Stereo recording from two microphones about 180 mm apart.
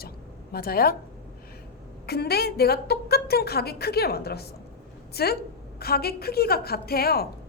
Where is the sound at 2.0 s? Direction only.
60° left (ahead or behind).